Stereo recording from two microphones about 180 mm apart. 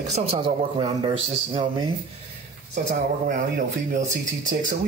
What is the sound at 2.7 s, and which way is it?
Speech, 45° right (ahead or behind).